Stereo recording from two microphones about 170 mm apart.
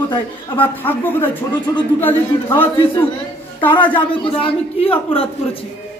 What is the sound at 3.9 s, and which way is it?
Speech, 30° left (ahead or behind).